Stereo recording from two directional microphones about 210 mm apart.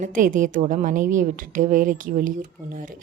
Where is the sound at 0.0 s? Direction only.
40° right (ahead or behind).